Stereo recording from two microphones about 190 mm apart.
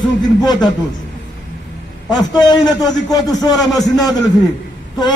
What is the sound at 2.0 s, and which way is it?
A man's voice, 20° left (ahead or behind).